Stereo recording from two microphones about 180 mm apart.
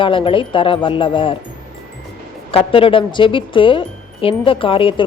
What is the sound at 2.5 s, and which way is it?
Speech, 30° left (ahead or behind).